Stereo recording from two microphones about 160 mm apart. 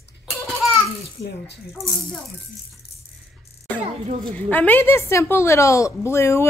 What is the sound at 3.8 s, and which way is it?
Speech, 40° right (ahead or behind).